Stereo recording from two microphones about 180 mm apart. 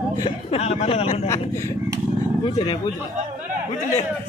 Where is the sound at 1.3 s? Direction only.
15° left (ahead or behind).